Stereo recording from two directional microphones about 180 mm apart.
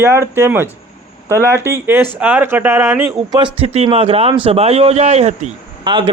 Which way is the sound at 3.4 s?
30° right (ahead or behind).